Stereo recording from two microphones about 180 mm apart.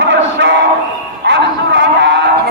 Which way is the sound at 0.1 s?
85° right.